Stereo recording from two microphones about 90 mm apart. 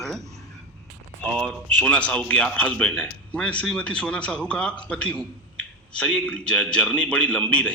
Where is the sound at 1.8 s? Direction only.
15° left (ahead or behind).